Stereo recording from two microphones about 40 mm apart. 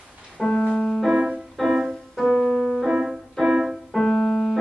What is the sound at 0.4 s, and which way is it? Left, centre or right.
Music, centre.